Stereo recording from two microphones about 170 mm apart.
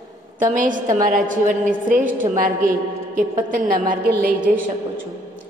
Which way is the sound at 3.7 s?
55° right (ahead or behind).